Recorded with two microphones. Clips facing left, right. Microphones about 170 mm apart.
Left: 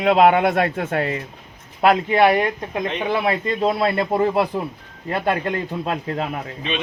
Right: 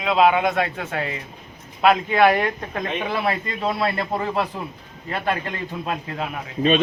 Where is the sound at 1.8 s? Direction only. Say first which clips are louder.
Left 1 dB; 20° left (ahead or behind).